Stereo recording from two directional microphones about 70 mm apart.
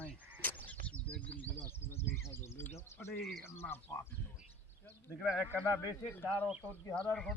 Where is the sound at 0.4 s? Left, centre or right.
Left.